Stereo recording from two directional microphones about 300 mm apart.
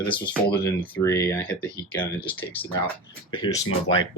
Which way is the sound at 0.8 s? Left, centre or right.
Centre.